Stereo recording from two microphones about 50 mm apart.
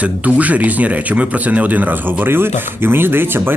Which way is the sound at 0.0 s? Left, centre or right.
Right.